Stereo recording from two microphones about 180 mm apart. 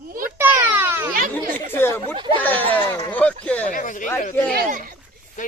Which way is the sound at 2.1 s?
25° right (ahead or behind).